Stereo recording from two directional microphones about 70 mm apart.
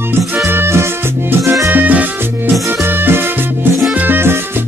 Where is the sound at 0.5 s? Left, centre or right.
Right.